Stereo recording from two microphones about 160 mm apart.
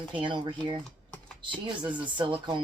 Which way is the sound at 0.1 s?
30° right (ahead or behind).